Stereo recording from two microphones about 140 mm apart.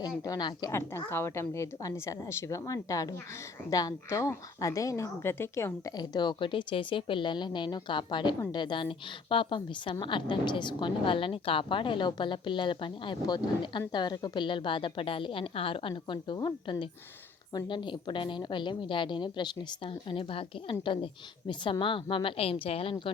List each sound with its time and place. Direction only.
0.2 s a woman's voice: 30° left (ahead or behind)
0.7 s a woman's voice: 20° left (ahead or behind); by 23.1 s 40° left (ahead or behind)